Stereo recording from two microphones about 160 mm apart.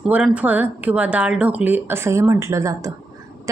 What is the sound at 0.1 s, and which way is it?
A woman's voice, 10° right (ahead or behind).